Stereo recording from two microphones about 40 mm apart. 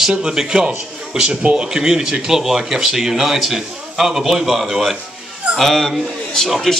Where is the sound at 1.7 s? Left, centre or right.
Centre.